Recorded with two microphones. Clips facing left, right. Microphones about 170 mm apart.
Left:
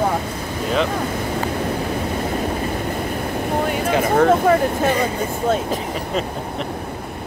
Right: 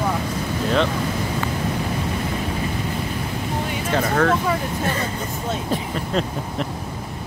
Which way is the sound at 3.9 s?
15° left (ahead or behind).